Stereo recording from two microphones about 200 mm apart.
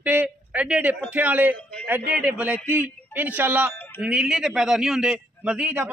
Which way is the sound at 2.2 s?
5° right (ahead or behind).